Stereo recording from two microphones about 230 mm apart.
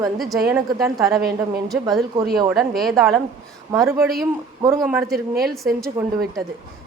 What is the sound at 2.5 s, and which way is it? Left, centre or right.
Speech, centre.